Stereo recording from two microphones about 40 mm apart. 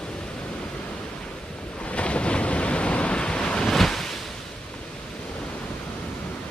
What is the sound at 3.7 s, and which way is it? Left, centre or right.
Waves, centre.